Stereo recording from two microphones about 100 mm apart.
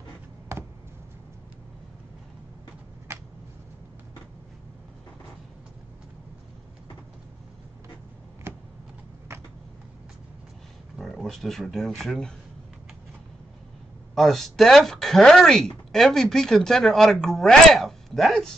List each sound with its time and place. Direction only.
3.1 s a sound: 25° right (ahead or behind)
11.0 s speech: centre (ahead or behind)
14.1 s speech: centre (ahead or behind)